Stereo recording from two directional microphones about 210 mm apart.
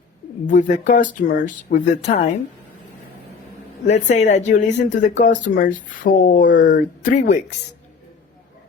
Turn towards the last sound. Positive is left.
turn(degrees=35)  # may be behind; listen again after turning